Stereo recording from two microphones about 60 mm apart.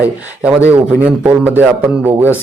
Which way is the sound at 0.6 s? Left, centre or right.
Right.